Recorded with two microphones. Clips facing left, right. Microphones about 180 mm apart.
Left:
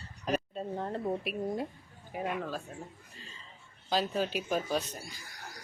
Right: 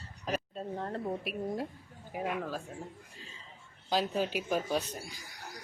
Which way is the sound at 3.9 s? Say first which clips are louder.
Even; 10° right (ahead or behind).